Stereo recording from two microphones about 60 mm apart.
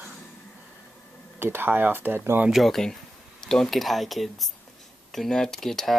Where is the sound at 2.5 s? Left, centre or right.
Centre.